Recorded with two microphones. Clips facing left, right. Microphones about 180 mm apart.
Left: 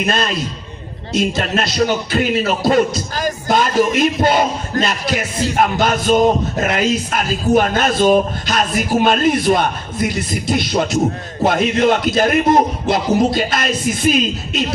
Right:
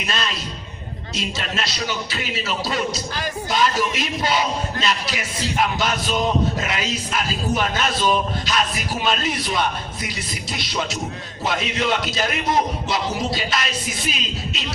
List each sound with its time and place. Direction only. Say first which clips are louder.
0.0 s speech: left 8 dB; 50° left (ahead or behind)